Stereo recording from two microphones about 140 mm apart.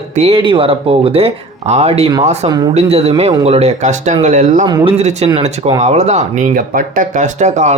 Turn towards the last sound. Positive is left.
turn(degrees=-55)  # may be behind; listen again after turning